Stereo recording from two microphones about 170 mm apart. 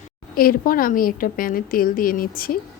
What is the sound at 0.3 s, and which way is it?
A woman's voice, 55° left (ahead or behind).